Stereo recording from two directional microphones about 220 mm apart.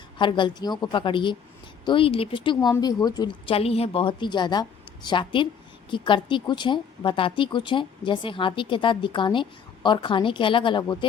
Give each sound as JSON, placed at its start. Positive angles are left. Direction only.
{"t": 0.2, "sound": "speech", "side_deg": 20}